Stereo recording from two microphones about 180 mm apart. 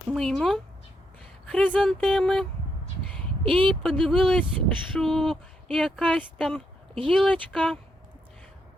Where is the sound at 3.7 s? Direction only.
5° left (ahead or behind).